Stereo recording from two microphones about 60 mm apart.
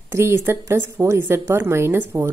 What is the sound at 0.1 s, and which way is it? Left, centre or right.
A woman's voice, right.